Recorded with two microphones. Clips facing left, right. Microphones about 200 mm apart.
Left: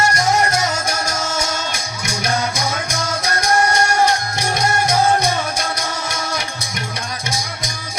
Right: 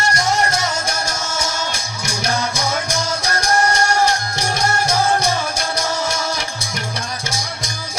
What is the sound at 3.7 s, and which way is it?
Music, 30° right (ahead or behind).